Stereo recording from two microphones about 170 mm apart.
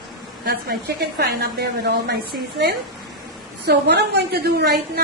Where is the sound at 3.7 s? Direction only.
85° right.